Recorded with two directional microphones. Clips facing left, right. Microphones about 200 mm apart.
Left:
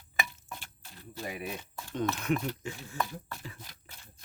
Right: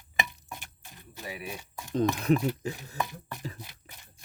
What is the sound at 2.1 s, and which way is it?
Speech, 35° right (ahead or behind).